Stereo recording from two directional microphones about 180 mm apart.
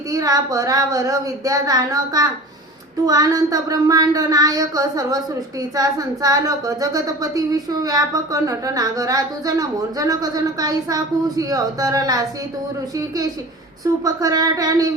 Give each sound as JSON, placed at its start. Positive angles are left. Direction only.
{"t": 0.1, "sound": "speech", "side_deg": -20}
{"t": 14.0, "sound": "speech", "side_deg": -20}